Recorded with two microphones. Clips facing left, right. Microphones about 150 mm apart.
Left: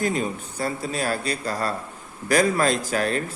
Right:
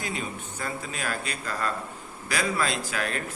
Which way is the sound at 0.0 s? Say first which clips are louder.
Left 8 dB; 40° left (ahead or behind).